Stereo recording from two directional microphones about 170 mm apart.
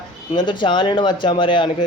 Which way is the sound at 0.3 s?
30° left (ahead or behind).